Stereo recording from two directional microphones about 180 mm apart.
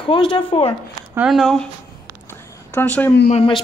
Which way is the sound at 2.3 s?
15° left (ahead or behind).